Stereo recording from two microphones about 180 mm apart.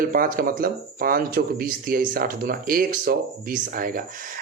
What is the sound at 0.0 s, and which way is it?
Speech, 50° right (ahead or behind).